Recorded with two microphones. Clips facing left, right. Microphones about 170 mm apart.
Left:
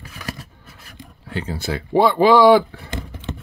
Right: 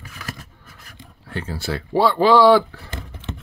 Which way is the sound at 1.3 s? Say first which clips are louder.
Left 1 dB; 20° left (ahead or behind).